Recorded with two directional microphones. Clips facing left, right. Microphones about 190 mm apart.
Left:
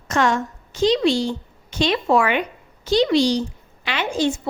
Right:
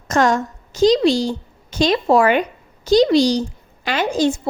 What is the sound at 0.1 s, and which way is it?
A woman's voice, 40° right (ahead or behind).